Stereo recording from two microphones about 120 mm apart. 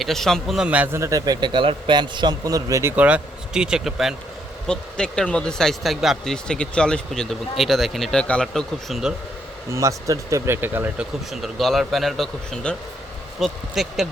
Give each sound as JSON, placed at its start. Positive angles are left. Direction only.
{"t": 0.0, "sound": "speech", "side_deg": 5}
{"t": 0.9, "sound": "a man's voice", "side_deg": -25}
{"t": 2.9, "sound": "speech", "side_deg": -10}
{"t": 9.7, "sound": "speech", "side_deg": -25}
{"t": 11.3, "sound": "speech", "side_deg": 0}